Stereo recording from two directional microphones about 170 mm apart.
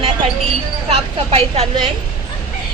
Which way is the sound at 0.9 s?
35° right (ahead or behind).